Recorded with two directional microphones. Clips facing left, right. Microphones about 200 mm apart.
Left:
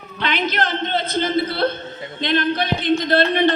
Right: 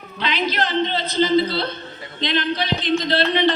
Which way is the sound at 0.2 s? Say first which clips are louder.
Left 1 dB; 55° left (ahead or behind).